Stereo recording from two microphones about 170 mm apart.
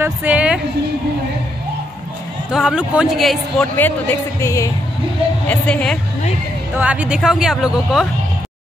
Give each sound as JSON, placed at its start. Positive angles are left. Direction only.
{"t": 0.0, "sound": "a woman's voice", "side_deg": -10}
{"t": 2.5, "sound": "speech", "side_deg": -5}
{"t": 3.7, "sound": "a woman's voice", "side_deg": 10}
{"t": 5.5, "sound": "a woman's voice", "side_deg": 5}
{"t": 6.8, "sound": "speech", "side_deg": -10}